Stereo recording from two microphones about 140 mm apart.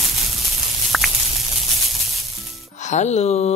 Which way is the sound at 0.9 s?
Centre (ahead or behind).